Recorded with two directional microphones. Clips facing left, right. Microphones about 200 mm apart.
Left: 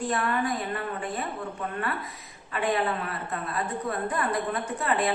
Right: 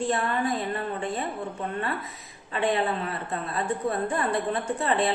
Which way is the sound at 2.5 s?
25° right (ahead or behind).